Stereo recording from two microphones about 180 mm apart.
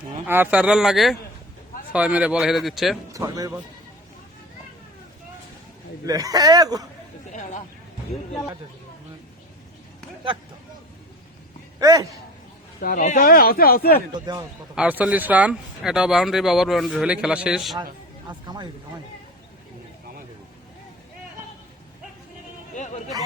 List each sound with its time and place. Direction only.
0.3 s a man's voice: 10° right (ahead or behind)
3.1 s a man's voice: 20° right (ahead or behind)
6.1 s a man's voice: 20° right (ahead or behind)
7.3 s vehicle: 45° left (ahead or behind)
11.8 s a man's voice: 20° right (ahead or behind)
12.8 s speech: 50° left (ahead or behind)
14.1 s a man's voice: 25° right (ahead or behind)
14.8 s speech: 10° right (ahead or behind)
18.3 s speech: 25° right (ahead or behind)
22.7 s a sound: 40° left (ahead or behind)